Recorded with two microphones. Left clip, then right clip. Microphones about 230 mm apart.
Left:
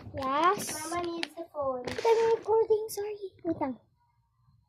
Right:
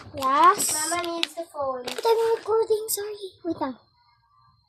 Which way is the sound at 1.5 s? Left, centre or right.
Right.